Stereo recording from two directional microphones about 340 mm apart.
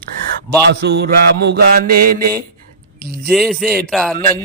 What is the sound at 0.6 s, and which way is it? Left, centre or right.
Mantra, right.